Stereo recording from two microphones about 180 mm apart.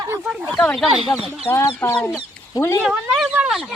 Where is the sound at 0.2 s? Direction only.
5° right (ahead or behind).